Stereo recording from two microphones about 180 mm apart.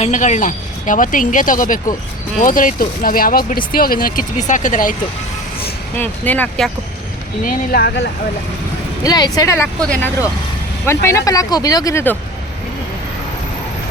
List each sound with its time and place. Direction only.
0.0 s speech: 45° left (ahead or behind)
6.0 s speech: 10° left (ahead or behind)
7.4 s speech: 55° left (ahead or behind)
9.0 s speech: 20° left (ahead or behind)
9.8 s speech: 5° left (ahead or behind)